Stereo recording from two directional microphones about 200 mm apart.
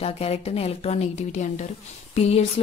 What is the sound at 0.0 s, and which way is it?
Speech, 30° left (ahead or behind).